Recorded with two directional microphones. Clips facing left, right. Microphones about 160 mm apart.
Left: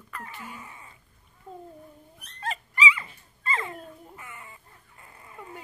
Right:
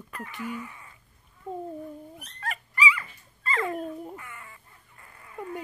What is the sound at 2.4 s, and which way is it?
Dog, 25° left (ahead or behind).